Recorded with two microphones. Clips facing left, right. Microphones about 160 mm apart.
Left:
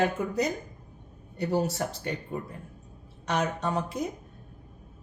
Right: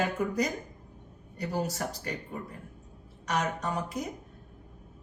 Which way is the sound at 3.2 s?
25° left (ahead or behind).